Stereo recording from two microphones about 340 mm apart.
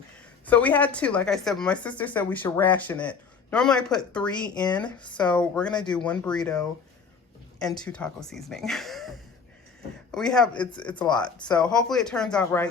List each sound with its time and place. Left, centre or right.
0.4 s speech: centre
11.6 s speech: centre